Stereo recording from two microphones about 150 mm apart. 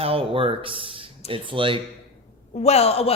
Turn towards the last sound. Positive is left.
turn(degrees=45)  # may be behind; listen again after turning